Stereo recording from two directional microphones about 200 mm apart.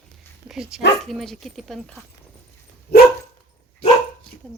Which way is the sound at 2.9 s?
50° left (ahead or behind).